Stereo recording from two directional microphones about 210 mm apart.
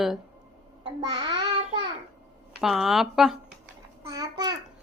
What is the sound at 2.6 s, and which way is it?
Speech, centre (ahead or behind).